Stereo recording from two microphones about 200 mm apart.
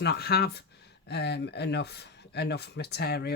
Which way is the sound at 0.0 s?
55° left (ahead or behind).